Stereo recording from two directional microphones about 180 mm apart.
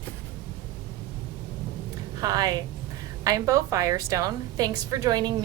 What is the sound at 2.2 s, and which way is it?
A woman's voice, 20° right (ahead or behind).